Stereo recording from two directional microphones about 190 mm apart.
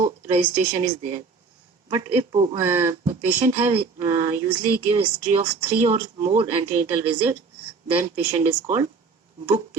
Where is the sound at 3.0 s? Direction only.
35° right (ahead or behind).